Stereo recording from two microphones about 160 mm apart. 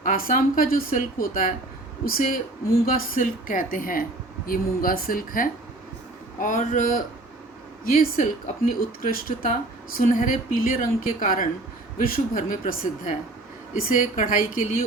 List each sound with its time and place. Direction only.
0.0 s speech: 60° left (ahead or behind)